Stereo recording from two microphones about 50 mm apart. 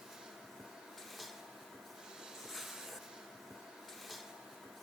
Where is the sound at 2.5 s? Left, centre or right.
Centre.